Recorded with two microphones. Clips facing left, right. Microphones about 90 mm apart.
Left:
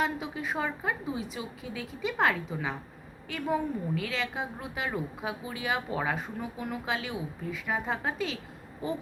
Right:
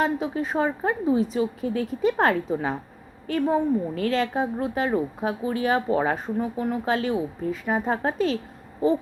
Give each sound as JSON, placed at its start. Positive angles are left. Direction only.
{"t": 0.0, "sound": "speech", "side_deg": -35}